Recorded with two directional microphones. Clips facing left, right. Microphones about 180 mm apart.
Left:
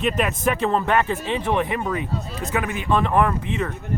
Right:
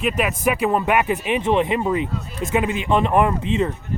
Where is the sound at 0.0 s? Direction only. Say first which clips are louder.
Right 1 dB; 5° right (ahead or behind).